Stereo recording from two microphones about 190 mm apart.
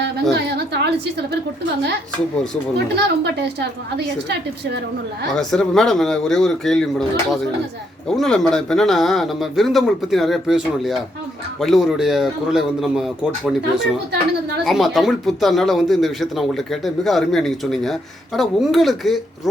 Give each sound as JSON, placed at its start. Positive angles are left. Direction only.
{"t": 0.0, "sound": "a sound", "side_deg": -60}
{"t": 2.7, "sound": "a woman's voice", "side_deg": -60}
{"t": 5.3, "sound": "speech", "side_deg": 0}
{"t": 8.0, "sound": "speech", "side_deg": 0}
{"t": 14.6, "sound": "speech", "side_deg": 0}